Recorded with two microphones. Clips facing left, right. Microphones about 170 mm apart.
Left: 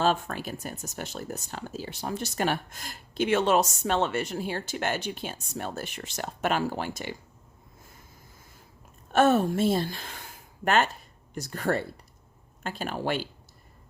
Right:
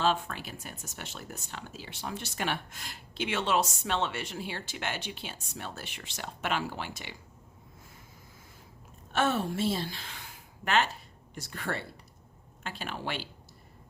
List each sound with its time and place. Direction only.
0.0 s speech: 45° left (ahead or behind)
9.1 s a woman's voice: 45° left (ahead or behind)